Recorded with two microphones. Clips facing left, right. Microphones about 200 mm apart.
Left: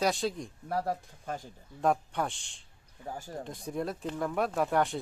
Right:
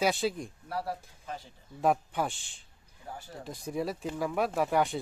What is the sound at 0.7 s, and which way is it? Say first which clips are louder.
Speech: left 4 dB; 45° left (ahead or behind).